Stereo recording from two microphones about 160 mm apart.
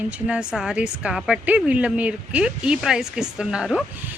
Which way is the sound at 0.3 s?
5° right (ahead or behind).